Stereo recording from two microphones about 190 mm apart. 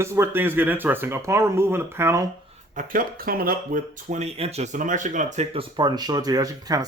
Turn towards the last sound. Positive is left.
turn(degrees=-20)  # may be behind; listen again after turning